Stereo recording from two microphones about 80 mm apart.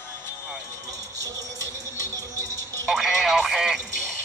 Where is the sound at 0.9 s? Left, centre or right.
Right.